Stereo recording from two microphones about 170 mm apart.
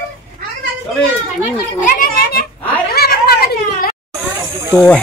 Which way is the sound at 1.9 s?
60° left (ahead or behind).